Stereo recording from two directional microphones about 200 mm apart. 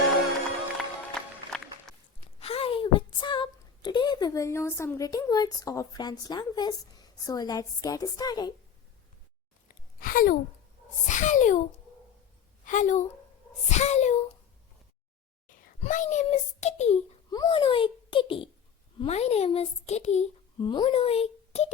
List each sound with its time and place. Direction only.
1.5 s music: 5° left (ahead or behind)
1.9 s gasp: 5° left (ahead or behind)
2.4 s a woman's voice: 30° left (ahead or behind)
9.6 s a sound: 45° left (ahead or behind)
11.1 s a child's voice: 40° left (ahead or behind)
12.6 s a woman's voice: 40° left (ahead or behind)
15.4 s a child's voice: 40° left (ahead or behind)
17.3 s a child's voice: 20° left (ahead or behind)